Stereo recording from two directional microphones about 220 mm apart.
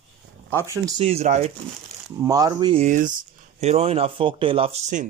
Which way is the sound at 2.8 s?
35° right (ahead or behind).